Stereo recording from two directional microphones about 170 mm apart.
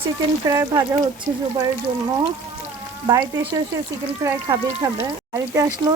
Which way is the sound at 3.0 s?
20° right (ahead or behind).